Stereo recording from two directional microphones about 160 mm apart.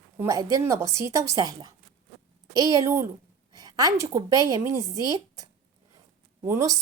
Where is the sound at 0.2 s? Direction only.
20° right (ahead or behind).